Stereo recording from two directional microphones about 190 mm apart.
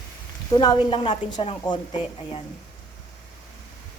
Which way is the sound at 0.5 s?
20° left (ahead or behind).